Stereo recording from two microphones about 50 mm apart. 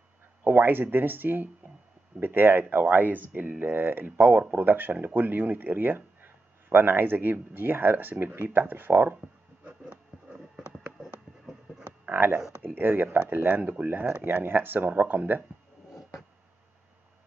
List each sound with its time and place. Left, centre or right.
0.4 s speech: right
10.3 s a sound: centre
12.1 s speech: right